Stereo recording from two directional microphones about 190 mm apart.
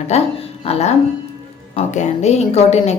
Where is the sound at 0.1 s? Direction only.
30° left (ahead or behind).